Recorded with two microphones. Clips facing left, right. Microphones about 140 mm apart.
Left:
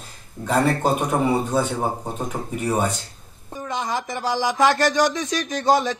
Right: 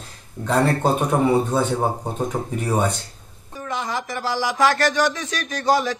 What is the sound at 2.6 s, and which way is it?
Speech, 5° left (ahead or behind).